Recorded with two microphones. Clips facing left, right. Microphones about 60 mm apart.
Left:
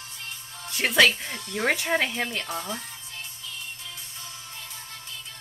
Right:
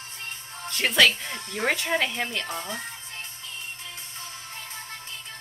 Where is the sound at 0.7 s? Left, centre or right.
Centre.